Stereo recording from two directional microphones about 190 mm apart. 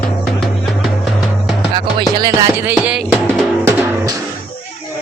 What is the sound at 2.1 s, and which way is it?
Music, 20° right (ahead or behind).